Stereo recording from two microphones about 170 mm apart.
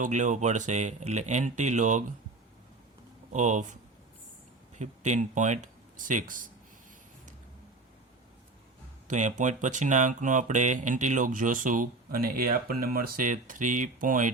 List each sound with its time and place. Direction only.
0.0 s speech: 45° right (ahead or behind)
3.3 s speech: 45° right (ahead or behind)
4.8 s speech: 45° right (ahead or behind)
9.0 s speech: 45° right (ahead or behind)